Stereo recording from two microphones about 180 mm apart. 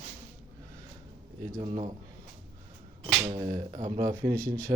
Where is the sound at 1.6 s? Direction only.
40° right (ahead or behind).